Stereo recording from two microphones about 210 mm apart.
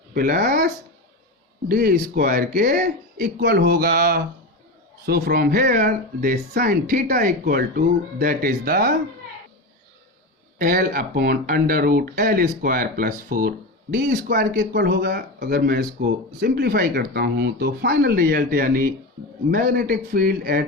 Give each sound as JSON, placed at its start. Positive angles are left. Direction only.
{"t": 0.1, "sound": "speech", "side_deg": -45}
{"t": 10.6, "sound": "speech", "side_deg": -40}